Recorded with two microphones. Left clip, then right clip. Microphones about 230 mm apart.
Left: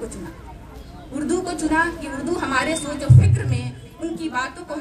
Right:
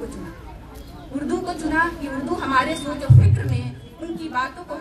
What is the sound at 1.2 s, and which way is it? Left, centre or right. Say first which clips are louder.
A woman's voice: left 3 dB; left.